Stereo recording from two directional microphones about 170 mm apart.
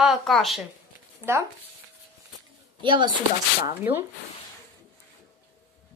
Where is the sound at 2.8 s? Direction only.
30° right (ahead or behind).